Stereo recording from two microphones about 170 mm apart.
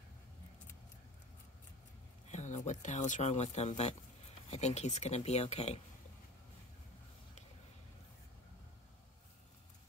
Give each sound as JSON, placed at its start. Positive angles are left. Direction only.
{"t": 2.3, "sound": "speech", "side_deg": 45}